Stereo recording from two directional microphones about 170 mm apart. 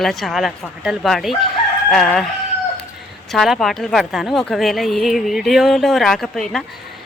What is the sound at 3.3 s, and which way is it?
Speech, centre (ahead or behind).